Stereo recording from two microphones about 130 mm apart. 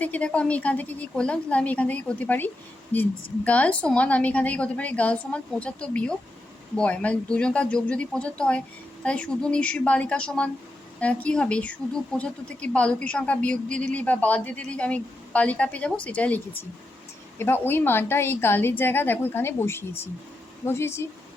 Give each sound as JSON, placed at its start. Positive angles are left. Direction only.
{"t": 0.0, "sound": "a woman's voice", "side_deg": 10}